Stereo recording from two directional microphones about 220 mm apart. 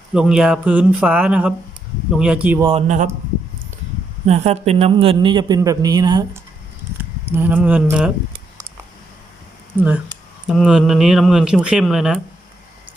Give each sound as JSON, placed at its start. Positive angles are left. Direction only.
{"t": 0.1, "sound": "speech", "side_deg": -5}
{"t": 2.6, "sound": "speech", "side_deg": -30}
{"t": 4.3, "sound": "a man's voice", "side_deg": -30}
{"t": 7.3, "sound": "speech", "side_deg": -10}
{"t": 9.7, "sound": "speech", "side_deg": -5}